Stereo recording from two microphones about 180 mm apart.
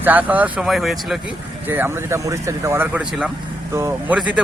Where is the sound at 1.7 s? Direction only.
15° right (ahead or behind).